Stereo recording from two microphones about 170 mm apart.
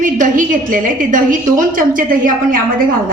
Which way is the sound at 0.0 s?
50° right (ahead or behind).